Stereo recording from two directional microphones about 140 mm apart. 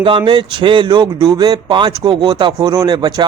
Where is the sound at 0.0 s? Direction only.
40° right (ahead or behind).